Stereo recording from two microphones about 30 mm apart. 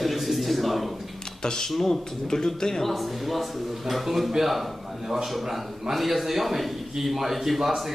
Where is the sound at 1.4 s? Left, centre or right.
Left.